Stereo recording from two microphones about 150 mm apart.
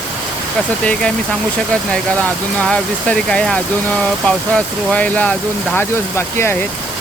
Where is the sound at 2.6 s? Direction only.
5° left (ahead or behind).